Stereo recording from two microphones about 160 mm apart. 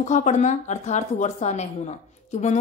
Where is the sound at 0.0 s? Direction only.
50° left (ahead or behind).